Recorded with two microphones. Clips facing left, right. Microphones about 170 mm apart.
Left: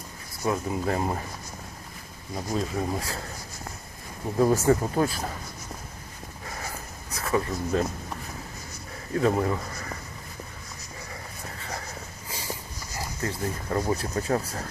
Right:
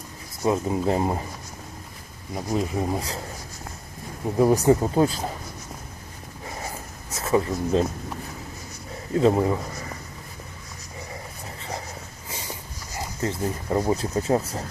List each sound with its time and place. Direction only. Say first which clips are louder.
0.4 s speech: right 4 dB; 25° right (ahead or behind)
2.5 s speech: right 3 dB; 15° right (ahead or behind)
4.4 s speech: right 3 dB; 15° right (ahead or behind)
7.1 s speech: right 4 dB; 25° right (ahead or behind)
9.1 s speech: right 4 dB; 20° right (ahead or behind)
13.0 s speech: right 4 dB; 20° right (ahead or behind)